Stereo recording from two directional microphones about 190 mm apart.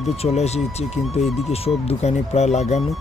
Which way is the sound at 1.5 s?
30° left (ahead or behind).